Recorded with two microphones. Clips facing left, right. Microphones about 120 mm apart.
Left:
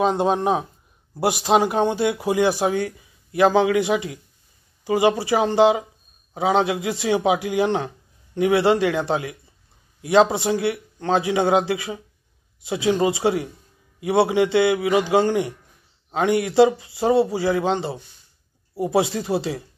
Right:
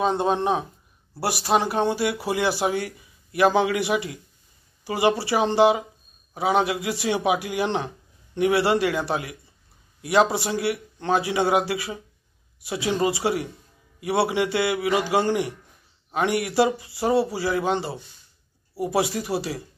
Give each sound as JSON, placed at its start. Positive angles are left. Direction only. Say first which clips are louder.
{"t": 0.0, "sound": "a man's voice", "louder": "left 3 dB", "side_deg": 15}
{"t": 3.7, "sound": "a man's voice", "louder": "left 3 dB", "side_deg": 20}